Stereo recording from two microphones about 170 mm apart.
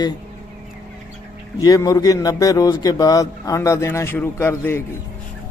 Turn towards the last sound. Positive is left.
turn(degrees=15)  # may be behind; listen again after turning